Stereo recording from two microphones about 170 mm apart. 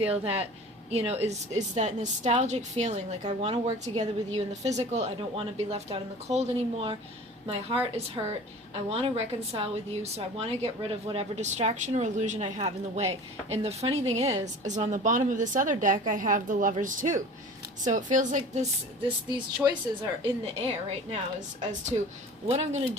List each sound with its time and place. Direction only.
0.1 s a woman's voice: 35° right (ahead or behind)
19.6 s a woman's voice: 30° right (ahead or behind)
21.7 s a woman's voice: 45° right (ahead or behind)